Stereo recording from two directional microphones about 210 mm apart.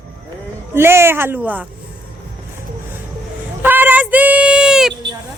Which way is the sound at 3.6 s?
10° right (ahead or behind).